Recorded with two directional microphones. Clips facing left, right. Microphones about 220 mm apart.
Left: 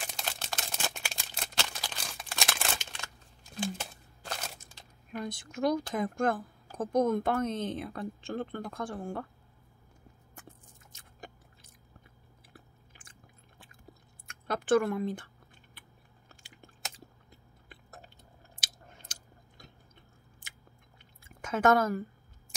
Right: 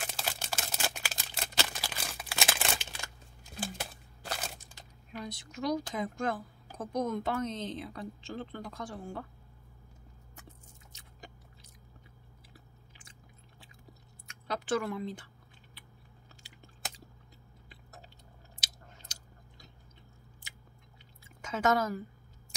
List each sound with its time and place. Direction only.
0.1 s a sound: 5° right (ahead or behind)
5.1 s speech: 50° left (ahead or behind)
10.9 s chewing: 50° left (ahead or behind)
14.2 s a sound: 50° left (ahead or behind)
16.3 s chewing: 50° left (ahead or behind)
18.6 s chewing: 55° left (ahead or behind)
21.4 s speech: 55° left (ahead or behind)